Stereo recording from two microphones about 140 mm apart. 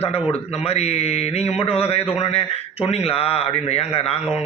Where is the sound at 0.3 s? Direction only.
45° left (ahead or behind).